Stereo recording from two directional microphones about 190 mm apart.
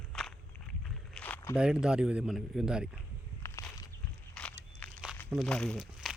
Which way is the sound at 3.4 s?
15° left (ahead or behind).